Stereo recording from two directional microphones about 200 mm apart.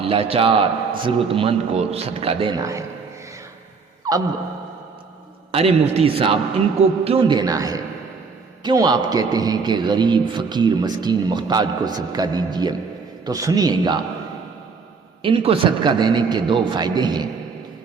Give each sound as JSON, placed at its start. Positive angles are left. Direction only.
{"t": 0.0, "sound": "a man's voice", "side_deg": -30}
{"t": 4.1, "sound": "sigh", "side_deg": -20}
{"t": 5.5, "sound": "a man's voice", "side_deg": -30}
{"t": 15.2, "sound": "a man's voice", "side_deg": -25}